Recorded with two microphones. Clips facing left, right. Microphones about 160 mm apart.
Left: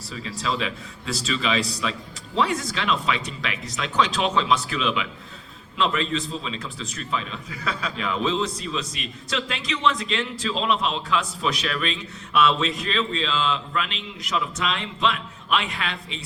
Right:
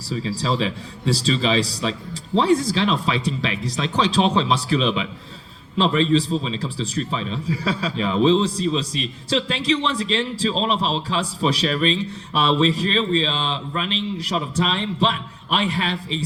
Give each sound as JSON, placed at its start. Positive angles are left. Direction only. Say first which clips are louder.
{"t": 0.1, "sound": "a man's voice", "louder": "right 5 dB", "side_deg": -30}